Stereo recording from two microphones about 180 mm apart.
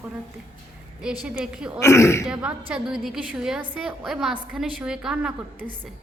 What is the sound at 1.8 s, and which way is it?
Speech, 15° left (ahead or behind).